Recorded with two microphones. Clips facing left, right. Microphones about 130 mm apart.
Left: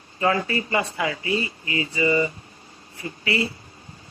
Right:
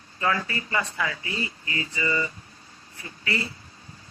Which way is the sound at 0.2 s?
25° left (ahead or behind).